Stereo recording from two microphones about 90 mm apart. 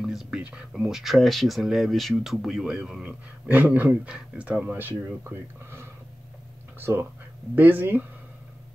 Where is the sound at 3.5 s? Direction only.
20° right (ahead or behind).